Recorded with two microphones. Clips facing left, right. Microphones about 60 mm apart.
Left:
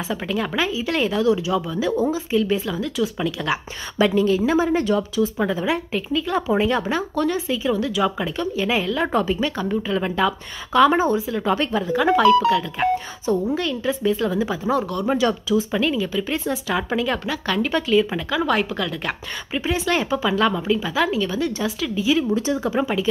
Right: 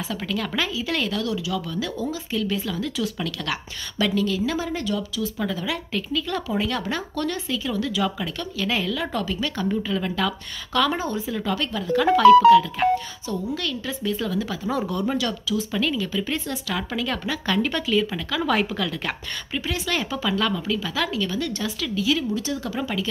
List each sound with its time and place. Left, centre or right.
0.1 s speech: centre
8.9 s speech: left
9.6 s speech: centre
9.9 s speech: centre
11.1 s speech: centre
11.4 s speech: left
11.8 s speech: centre
13.6 s speech: centre
14.7 s speech: centre
15.0 s speech: left
17.2 s speech: centre
18.5 s speech: centre
19.5 s speech: centre